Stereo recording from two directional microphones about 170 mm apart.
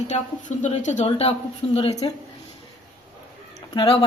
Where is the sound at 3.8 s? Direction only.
35° left (ahead or behind).